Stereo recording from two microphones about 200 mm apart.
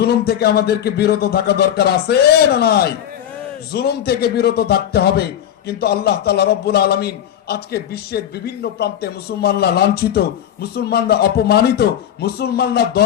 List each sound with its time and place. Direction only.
0.0 s a man's voice: 55° left (ahead or behind)